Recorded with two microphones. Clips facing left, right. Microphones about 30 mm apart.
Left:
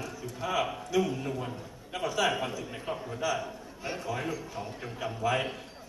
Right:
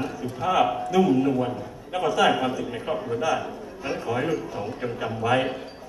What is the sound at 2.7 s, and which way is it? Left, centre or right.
Speech, right.